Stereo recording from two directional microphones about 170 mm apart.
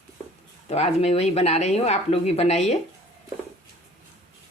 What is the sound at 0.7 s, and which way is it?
Speech, 40° left (ahead or behind).